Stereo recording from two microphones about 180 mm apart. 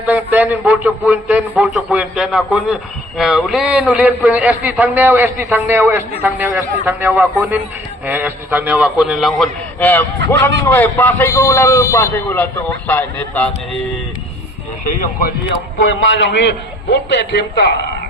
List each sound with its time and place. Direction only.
0.0 s a man's voice: 10° right (ahead or behind); by 13.5 s 10° left (ahead or behind)
15.8 s a man's voice: 90° left; by 17.7 s 70° left (ahead or behind)